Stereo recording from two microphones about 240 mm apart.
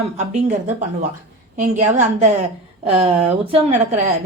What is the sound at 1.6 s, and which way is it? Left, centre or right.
A woman's voice, right.